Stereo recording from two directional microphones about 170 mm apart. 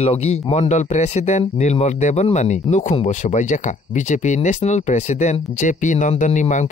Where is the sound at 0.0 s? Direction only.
35° left (ahead or behind).